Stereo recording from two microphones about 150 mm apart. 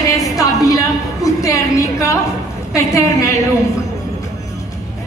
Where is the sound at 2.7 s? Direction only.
20° left (ahead or behind).